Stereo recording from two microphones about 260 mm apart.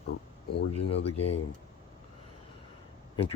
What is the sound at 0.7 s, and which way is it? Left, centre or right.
Speech, left.